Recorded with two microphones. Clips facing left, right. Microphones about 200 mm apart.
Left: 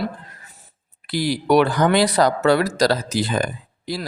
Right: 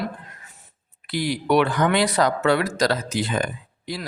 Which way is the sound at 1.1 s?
35° left (ahead or behind).